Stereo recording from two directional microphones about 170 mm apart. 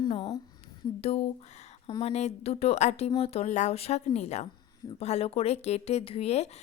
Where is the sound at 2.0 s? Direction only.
40° left (ahead or behind).